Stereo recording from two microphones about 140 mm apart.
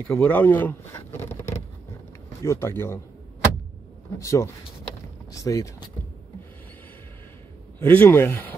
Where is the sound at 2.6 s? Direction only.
15° left (ahead or behind).